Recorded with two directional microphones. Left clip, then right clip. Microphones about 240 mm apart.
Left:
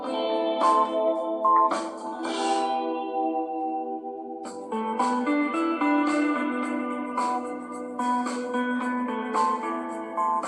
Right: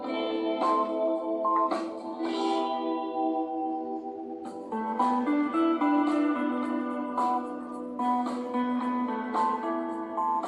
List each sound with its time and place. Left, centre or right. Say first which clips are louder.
0.1 s music: left 4 dB; left
4.9 s music: left 1 dB; left